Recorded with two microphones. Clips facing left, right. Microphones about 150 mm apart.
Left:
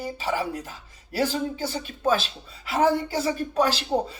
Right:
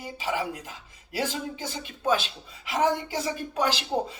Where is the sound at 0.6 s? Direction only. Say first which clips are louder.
Left 2 dB; 15° right (ahead or behind).